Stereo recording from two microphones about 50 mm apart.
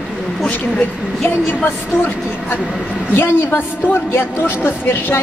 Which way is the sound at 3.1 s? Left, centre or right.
Left.